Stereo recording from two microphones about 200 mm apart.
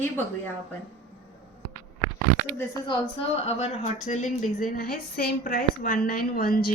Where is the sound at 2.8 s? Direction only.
25° left (ahead or behind).